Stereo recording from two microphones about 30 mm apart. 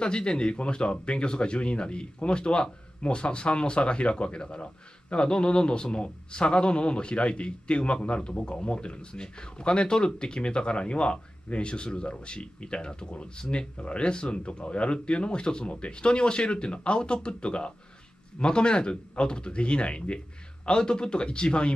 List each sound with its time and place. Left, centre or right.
0.0 s speech: left
8.3 s speech: left